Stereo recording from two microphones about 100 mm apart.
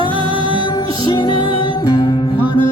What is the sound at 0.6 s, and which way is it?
Music, 45° left (ahead or behind).